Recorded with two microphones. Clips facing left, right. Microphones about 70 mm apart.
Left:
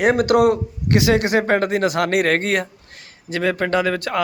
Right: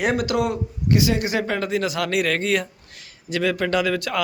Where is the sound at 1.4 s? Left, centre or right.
Left.